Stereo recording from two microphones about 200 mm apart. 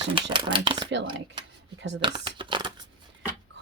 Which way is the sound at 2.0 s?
25° right (ahead or behind).